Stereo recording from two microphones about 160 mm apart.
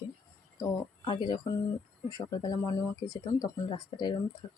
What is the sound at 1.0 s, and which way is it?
Speech, 30° left (ahead or behind).